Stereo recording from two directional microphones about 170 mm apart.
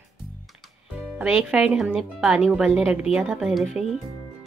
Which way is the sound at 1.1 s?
5° right (ahead or behind).